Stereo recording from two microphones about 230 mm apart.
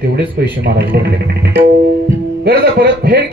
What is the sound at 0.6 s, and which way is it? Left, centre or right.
Speech, right.